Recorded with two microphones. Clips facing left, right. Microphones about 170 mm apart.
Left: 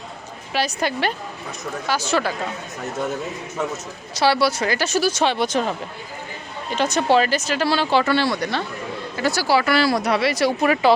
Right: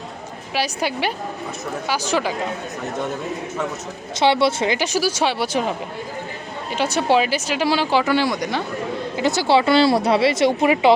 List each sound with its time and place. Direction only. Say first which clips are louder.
0.5 s speech: even; 10° right (ahead or behind)
4.1 s speech: right 1 dB; 20° right (ahead or behind)